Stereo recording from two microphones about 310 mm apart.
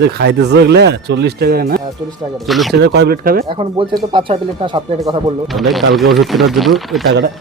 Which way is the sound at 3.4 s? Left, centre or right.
Centre.